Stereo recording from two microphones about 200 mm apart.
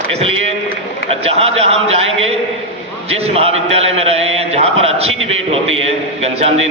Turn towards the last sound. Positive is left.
turn(degrees=-30)  # may be behind; listen again after turning